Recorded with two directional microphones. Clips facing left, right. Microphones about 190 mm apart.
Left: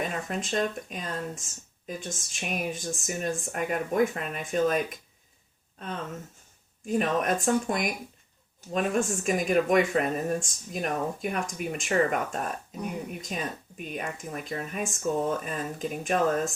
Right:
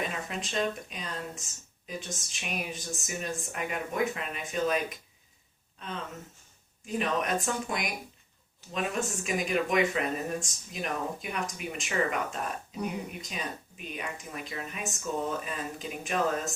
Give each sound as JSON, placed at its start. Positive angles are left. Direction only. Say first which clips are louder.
{"t": 0.0, "sound": "speech", "louder": "left 3 dB", "side_deg": 45}
{"t": 6.8, "sound": "speech", "louder": "left 4 dB", "side_deg": 45}